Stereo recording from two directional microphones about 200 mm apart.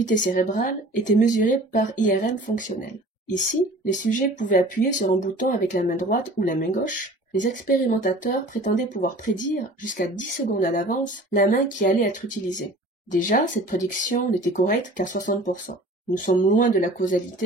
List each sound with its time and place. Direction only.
0.0 s speech: 40° left (ahead or behind)
4.0 s speech: 40° left (ahead or behind)
9.3 s speech: 65° left (ahead or behind)
9.6 s speech: 40° left (ahead or behind)